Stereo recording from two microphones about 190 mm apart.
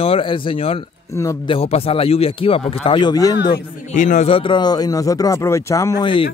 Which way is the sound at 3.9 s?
40° left (ahead or behind).